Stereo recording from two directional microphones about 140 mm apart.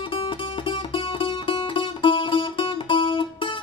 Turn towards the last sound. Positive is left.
turn(degrees=35)  # may be behind; listen again after turning